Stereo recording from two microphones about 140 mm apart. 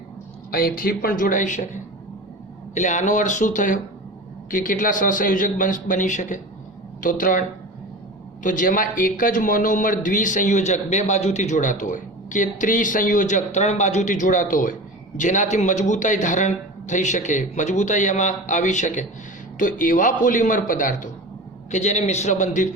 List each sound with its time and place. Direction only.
0.5 s a man's voice: 90° left; by 3.8 s 65° left (ahead or behind)
4.5 s a man's voice: 75° left (ahead or behind)
7.0 s a man's voice: 75° left (ahead or behind)
8.4 s a man's voice: 70° left (ahead or behind)
15.2 s a man's voice: 60° left (ahead or behind)
19.5 s a man's voice: 70° left (ahead or behind)
21.7 s a man's voice: 55° left (ahead or behind)